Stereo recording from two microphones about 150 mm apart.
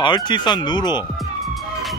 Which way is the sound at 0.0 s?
30° left (ahead or behind).